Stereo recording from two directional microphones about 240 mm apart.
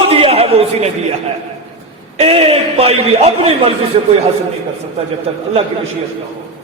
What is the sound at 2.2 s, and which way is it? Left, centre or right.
A man's voice, right.